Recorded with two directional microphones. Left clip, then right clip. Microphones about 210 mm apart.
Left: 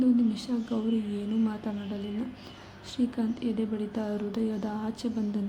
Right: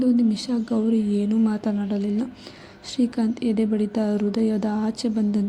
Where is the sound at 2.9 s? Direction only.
25° right (ahead or behind).